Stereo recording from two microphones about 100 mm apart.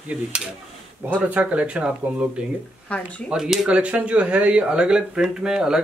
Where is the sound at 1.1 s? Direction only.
15° right (ahead or behind).